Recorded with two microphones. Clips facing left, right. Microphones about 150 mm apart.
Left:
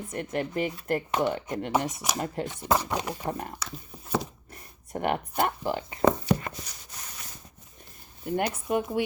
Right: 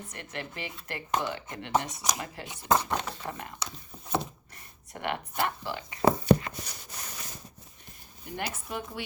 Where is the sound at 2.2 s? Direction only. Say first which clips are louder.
Left 8 dB; 45° left (ahead or behind).